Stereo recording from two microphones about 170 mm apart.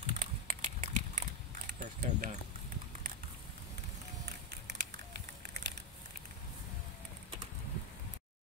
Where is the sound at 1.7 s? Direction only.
55° right (ahead or behind).